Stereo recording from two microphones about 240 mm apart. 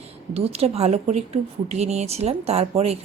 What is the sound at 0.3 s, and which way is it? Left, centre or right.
A woman's voice, right.